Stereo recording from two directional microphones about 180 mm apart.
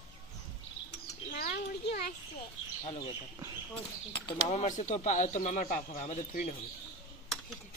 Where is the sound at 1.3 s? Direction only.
60° left (ahead or behind).